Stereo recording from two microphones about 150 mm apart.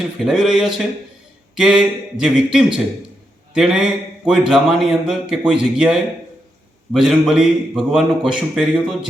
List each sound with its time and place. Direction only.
0.2 s a man's voice: 5° right (ahead or behind)